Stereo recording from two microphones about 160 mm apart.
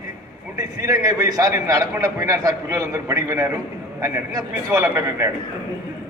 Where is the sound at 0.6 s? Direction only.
20° right (ahead or behind).